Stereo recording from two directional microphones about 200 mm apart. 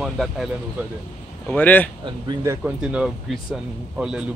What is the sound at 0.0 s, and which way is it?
Speech, centre (ahead or behind).